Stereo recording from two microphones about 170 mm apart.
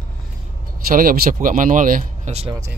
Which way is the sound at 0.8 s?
60° right (ahead or behind).